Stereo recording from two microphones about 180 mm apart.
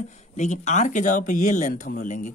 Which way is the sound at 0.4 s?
40° left (ahead or behind).